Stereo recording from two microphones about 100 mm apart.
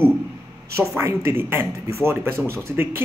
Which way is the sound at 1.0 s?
25° right (ahead or behind).